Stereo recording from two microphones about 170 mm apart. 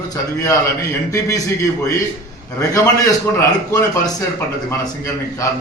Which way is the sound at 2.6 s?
20° left (ahead or behind).